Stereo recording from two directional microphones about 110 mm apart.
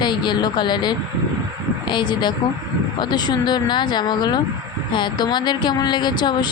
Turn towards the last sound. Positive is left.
turn(degrees=40)  # may be behind; listen again after turning